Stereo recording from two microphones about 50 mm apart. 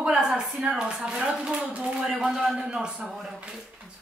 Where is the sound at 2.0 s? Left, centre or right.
Centre.